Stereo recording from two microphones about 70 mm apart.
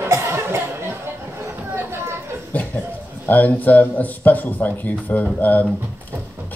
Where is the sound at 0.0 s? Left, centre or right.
Right.